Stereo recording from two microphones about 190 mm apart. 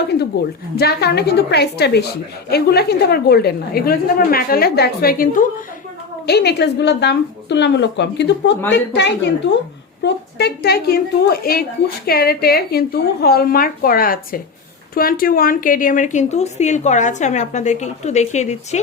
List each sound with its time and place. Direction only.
0.8 s a woman's voice: 55° left (ahead or behind)
6.2 s a woman's voice: 60° left (ahead or behind); by 18.8 s 35° left (ahead or behind)